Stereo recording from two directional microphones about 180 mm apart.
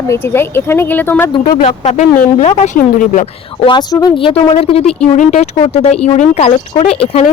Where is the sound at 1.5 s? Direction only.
50° left (ahead or behind).